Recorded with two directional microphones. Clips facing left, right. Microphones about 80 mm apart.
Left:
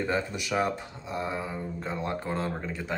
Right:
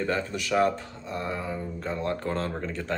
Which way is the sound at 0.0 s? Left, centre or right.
Centre.